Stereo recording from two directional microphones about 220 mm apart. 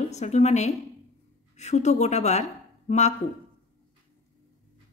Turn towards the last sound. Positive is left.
turn(degrees=30)  # may be behind; listen again after turning